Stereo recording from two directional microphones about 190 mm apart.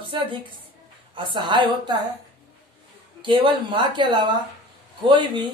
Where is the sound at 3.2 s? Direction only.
25° right (ahead or behind).